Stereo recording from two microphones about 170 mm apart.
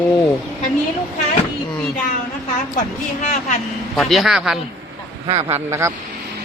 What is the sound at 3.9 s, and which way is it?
Speech, centre (ahead or behind).